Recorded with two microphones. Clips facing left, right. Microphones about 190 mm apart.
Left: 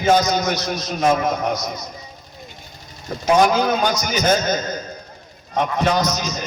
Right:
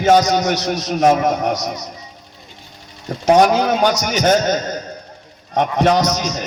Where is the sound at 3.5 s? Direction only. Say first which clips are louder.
Right 3 dB; 70° right (ahead or behind).